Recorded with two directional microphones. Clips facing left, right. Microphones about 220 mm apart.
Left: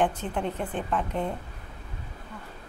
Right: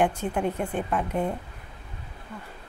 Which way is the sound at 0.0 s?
10° right (ahead or behind).